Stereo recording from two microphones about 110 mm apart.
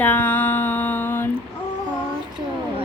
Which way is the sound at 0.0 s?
15° left (ahead or behind).